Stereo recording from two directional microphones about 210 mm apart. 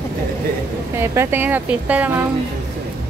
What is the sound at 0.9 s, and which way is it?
A woman's voice, 10° right (ahead or behind).